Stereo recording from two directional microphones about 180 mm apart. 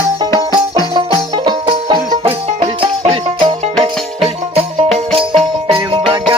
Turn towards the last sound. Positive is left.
turn(degrees=-30)  # may be behind; listen again after turning